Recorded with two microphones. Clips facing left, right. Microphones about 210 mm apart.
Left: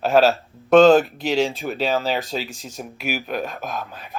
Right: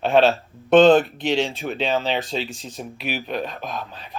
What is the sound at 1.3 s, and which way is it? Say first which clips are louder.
Speech: left 5 dB; centre (ahead or behind).